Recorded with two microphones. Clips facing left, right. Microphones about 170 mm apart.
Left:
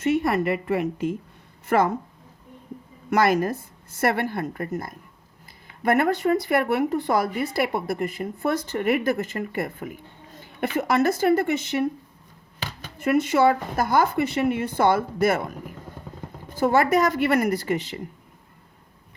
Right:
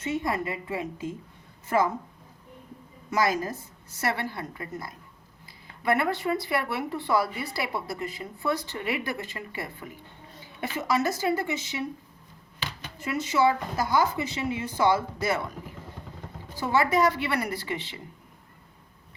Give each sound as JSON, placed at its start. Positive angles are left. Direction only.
{"t": 0.0, "sound": "a woman's voice", "side_deg": 70}
{"t": 3.1, "sound": "speech", "side_deg": 65}
{"t": 16.6, "sound": "speech", "side_deg": 50}